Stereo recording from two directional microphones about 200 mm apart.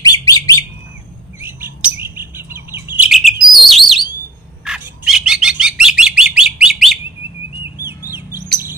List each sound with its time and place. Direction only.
0.0 s bird: 20° left (ahead or behind)
1.4 s chirp: 10° right (ahead or behind)
3.5 s bird: centre (ahead or behind)
7.8 s chirp: 10° right (ahead or behind)